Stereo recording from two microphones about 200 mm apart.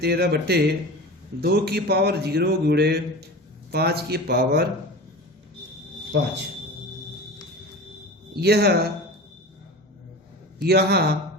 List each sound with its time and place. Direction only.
0.0 s a man's voice: 55° right (ahead or behind)
6.1 s a man's voice: 60° right (ahead or behind)
8.4 s a man's voice: 55° right (ahead or behind)
10.6 s a man's voice: 55° right (ahead or behind)